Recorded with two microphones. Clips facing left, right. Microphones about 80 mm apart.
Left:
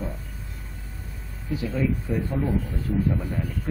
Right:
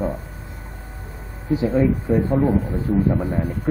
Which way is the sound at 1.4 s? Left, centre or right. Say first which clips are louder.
Right 8 dB; right.